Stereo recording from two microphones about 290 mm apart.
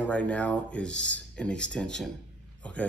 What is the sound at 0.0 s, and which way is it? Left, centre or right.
Speech, centre.